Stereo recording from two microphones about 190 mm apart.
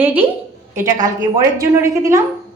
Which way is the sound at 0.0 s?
10° right (ahead or behind).